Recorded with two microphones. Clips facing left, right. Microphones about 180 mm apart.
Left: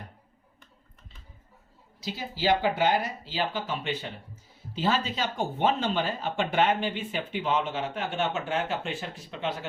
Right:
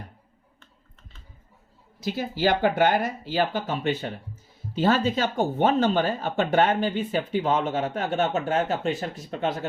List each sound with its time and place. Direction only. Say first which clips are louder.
2.0 s speech: right 7 dB; 55° right (ahead or behind)